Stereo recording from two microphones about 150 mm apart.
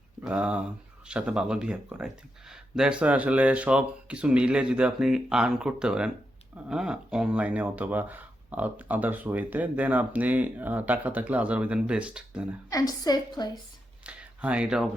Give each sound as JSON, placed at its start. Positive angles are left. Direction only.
{"t": 0.2, "sound": "speech", "side_deg": -10}
{"t": 12.7, "sound": "a woman's voice", "side_deg": 25}
{"t": 14.0, "sound": "a sound", "side_deg": -10}